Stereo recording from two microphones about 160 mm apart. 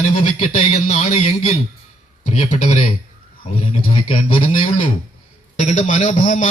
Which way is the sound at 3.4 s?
35° left (ahead or behind).